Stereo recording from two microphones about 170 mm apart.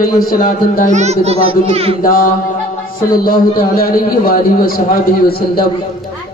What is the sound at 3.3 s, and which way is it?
A man's voice, 60° left (ahead or behind).